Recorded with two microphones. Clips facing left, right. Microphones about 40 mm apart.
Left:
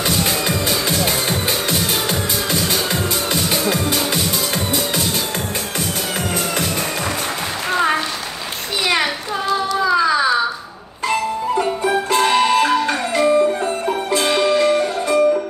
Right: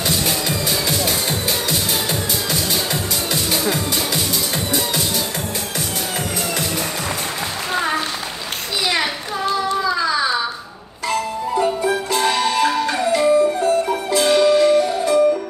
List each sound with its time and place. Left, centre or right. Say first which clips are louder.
0.0 s music: left 2 dB; left
11.6 s music: even; left